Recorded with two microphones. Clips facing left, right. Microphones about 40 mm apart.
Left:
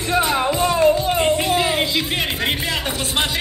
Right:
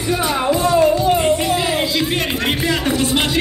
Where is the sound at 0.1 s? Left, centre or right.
Left.